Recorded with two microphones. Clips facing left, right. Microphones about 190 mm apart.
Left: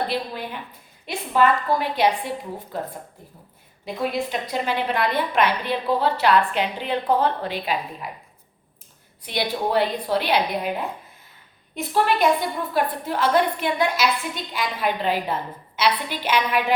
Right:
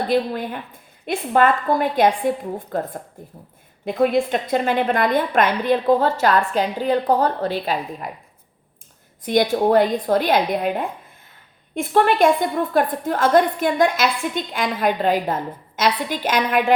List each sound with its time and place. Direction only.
0.1 s a woman's voice: 50° right (ahead or behind)
9.2 s a woman's voice: 45° right (ahead or behind)
11.8 s a woman's voice: 50° right (ahead or behind)